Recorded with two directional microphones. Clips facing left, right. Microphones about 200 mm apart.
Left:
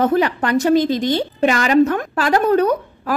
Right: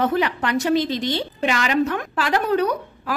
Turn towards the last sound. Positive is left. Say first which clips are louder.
# left 5 dB
turn(degrees=45)  # may be behind; listen again after turning